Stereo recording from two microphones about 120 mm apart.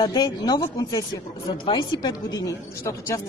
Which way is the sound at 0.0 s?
35° left (ahead or behind).